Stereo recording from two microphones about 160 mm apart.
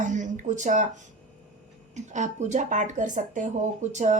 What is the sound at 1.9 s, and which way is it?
A woman's voice, 45° right (ahead or behind).